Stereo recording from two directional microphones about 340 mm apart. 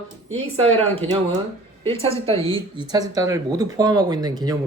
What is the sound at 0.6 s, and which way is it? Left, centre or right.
Speech, centre.